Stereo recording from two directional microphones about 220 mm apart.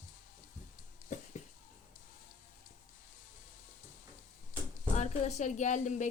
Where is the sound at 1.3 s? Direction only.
35° left (ahead or behind).